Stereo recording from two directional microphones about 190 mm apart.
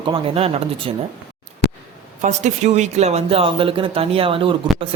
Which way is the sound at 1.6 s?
65° left (ahead or behind).